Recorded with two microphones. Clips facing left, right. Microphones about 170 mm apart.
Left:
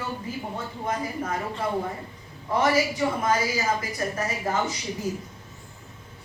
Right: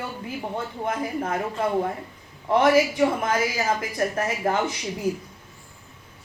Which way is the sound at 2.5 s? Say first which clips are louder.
Right 4 dB; 60° right (ahead or behind).